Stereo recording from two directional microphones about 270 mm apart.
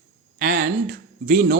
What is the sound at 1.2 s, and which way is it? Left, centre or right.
Speech, right.